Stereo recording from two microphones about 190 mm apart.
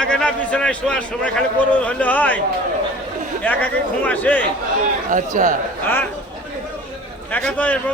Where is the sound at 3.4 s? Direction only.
10° left (ahead or behind).